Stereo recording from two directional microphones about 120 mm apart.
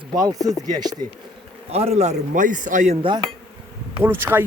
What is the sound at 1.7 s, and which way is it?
A man's voice, 60° right (ahead or behind).